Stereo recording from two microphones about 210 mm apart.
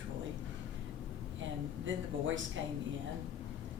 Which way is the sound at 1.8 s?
65° right (ahead or behind).